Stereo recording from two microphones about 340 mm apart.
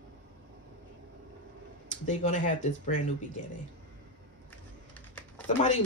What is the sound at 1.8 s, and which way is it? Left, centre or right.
Speech, left.